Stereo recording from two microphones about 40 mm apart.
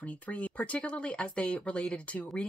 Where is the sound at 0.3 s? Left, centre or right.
Left.